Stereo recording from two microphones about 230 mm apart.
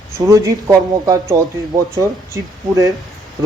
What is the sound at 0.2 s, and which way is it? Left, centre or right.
A man's voice, centre.